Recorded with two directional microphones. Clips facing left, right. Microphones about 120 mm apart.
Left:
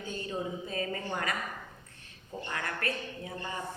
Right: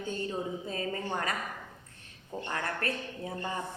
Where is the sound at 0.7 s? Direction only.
30° right (ahead or behind).